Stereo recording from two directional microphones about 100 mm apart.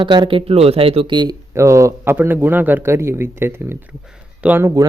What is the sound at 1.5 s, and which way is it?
Speech, 30° right (ahead or behind).